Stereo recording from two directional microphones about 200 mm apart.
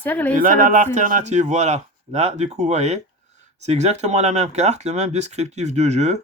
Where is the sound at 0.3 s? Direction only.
40° right (ahead or behind).